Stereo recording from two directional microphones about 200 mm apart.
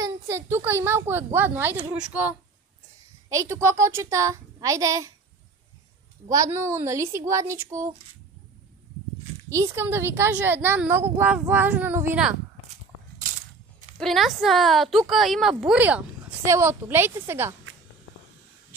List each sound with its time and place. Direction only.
0.0 s speech: 15° right (ahead or behind)
6.2 s speech: 15° right (ahead or behind)
9.5 s speech: 15° right (ahead or behind)
13.9 s a woman's voice: centre (ahead or behind)